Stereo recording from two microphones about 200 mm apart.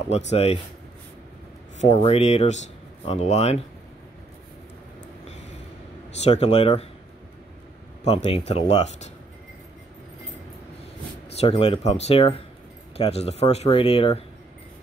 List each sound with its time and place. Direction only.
0.3 s speech: 30° left (ahead or behind)
1.8 s speech: 35° left (ahead or behind)
6.2 s speech: 30° left (ahead or behind)
8.0 s speech: 30° left (ahead or behind)
11.3 s speech: 30° left (ahead or behind)